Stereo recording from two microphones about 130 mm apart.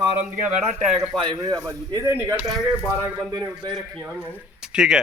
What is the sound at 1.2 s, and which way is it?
Speech, 30° right (ahead or behind).